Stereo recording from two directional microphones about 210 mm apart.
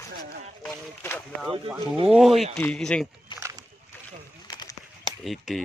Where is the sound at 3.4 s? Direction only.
15° right (ahead or behind).